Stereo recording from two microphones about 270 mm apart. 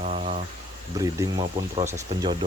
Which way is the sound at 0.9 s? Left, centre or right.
Centre.